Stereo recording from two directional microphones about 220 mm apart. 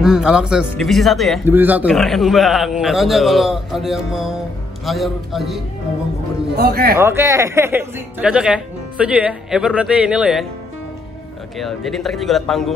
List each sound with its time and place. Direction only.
0.0 s speech: 5° right (ahead or behind)
6.5 s a man's voice: 45° right (ahead or behind)
7.0 s speech: 10° right (ahead or behind)
11.5 s speech: centre (ahead or behind)